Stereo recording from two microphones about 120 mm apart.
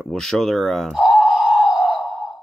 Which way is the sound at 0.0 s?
5° left (ahead or behind).